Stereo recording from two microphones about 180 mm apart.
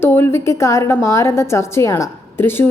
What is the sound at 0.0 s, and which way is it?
A woman's voice, 10° left (ahead or behind).